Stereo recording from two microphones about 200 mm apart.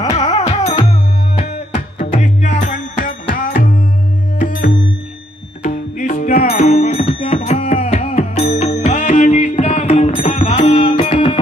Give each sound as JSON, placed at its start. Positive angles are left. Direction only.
{"t": 0.2, "sound": "music", "side_deg": 20}
{"t": 5.6, "sound": "music", "side_deg": 40}